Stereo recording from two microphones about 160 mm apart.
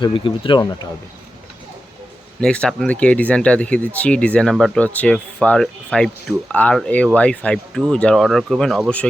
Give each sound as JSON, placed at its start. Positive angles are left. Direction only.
{"t": 0.0, "sound": "speech", "side_deg": 30}
{"t": 2.4, "sound": "speech", "side_deg": 5}